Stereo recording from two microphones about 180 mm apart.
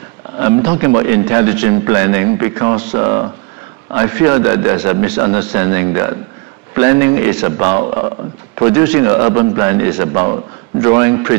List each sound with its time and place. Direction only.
0.4 s a man's voice: 10° right (ahead or behind)